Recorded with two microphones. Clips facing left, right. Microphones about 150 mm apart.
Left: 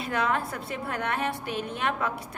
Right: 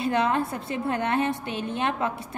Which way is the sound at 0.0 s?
25° right (ahead or behind).